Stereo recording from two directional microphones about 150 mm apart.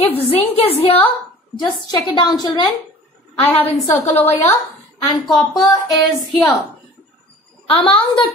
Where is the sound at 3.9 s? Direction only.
10° left (ahead or behind).